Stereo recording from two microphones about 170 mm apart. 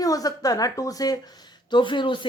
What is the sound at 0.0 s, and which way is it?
Speech, 20° left (ahead or behind).